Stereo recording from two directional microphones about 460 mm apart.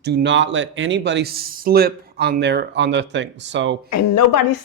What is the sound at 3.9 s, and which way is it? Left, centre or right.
Speech, left.